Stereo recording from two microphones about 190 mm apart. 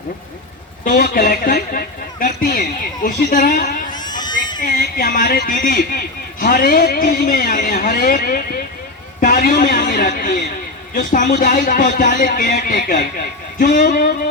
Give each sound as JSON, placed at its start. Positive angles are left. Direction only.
{"t": 0.9, "sound": "a man's voice", "side_deg": 50}
{"t": 3.9, "sound": "a sound", "side_deg": 20}
{"t": 4.6, "sound": "a man's voice", "side_deg": 50}